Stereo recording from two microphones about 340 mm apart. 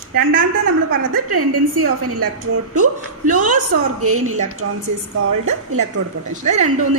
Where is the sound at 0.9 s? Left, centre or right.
Right.